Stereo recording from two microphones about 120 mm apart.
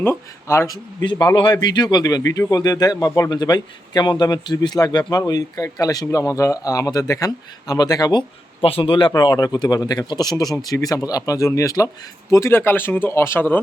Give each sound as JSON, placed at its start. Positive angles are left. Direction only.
{"t": 0.0, "sound": "speech", "side_deg": 20}
{"t": 1.0, "sound": "speech", "side_deg": 40}
{"t": 8.6, "sound": "speech", "side_deg": 50}